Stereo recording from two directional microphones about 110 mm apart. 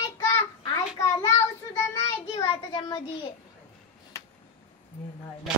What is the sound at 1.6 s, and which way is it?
Child singing, 30° left (ahead or behind).